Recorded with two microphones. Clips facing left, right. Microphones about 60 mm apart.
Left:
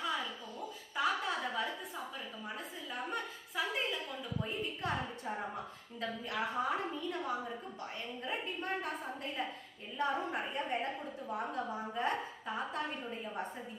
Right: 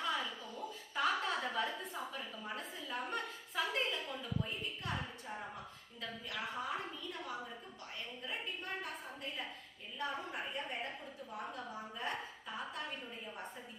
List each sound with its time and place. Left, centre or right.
0.0 s a sound: centre
4.4 s a woman's voice: left
6.0 s a woman's voice: left
10.0 s a woman's voice: left